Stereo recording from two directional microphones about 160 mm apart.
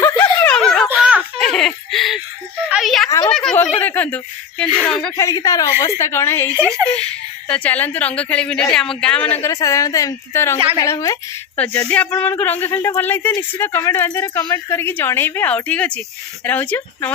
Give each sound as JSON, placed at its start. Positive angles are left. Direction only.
{"t": 0.0, "sound": "a sound", "side_deg": 15}
{"t": 3.8, "sound": "speech", "side_deg": 10}
{"t": 5.1, "sound": "a woman's voice", "side_deg": 20}
{"t": 9.4, "sound": "a woman's voice", "side_deg": 20}
{"t": 11.5, "sound": "speech", "side_deg": 10}